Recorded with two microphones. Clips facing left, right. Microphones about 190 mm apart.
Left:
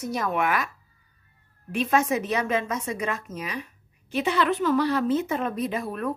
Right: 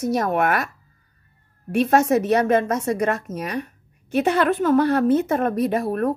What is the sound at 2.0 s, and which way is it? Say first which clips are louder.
A woman's voice: right 7 dB; 55° right (ahead or behind).